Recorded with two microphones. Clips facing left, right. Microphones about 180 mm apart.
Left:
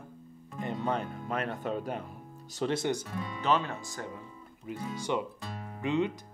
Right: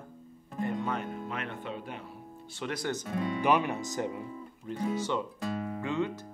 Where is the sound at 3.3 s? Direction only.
15° right (ahead or behind).